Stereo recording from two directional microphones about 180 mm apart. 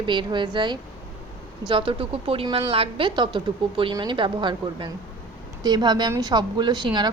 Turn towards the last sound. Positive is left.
turn(degrees=-25)  # may be behind; listen again after turning